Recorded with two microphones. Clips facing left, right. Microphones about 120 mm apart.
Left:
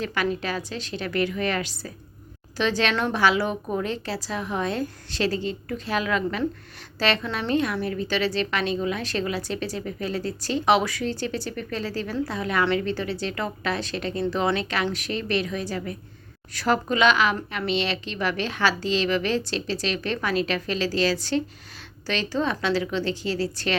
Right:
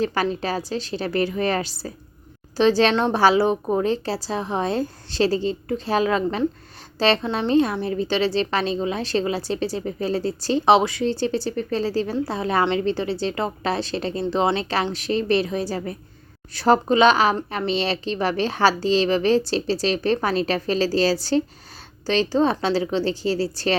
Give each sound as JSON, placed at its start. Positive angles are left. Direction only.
{"t": 0.0, "sound": "a woman's voice", "side_deg": -35}